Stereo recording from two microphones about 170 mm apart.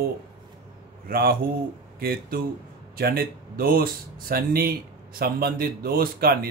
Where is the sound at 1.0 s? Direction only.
60° right (ahead or behind).